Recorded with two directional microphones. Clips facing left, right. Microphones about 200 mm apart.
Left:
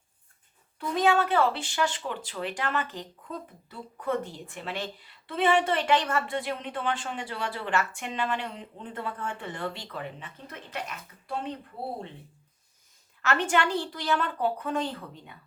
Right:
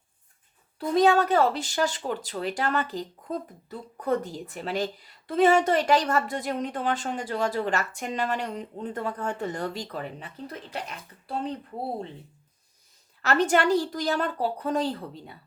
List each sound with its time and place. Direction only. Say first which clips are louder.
0.8 s speech: right 4 dB; 40° right (ahead or behind)
13.2 s speech: right 4 dB; 40° right (ahead or behind)